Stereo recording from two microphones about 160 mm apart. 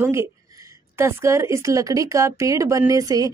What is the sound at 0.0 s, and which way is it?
Speech, 15° right (ahead or behind).